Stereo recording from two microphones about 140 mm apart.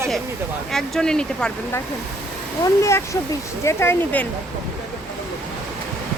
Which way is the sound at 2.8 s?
20° left (ahead or behind).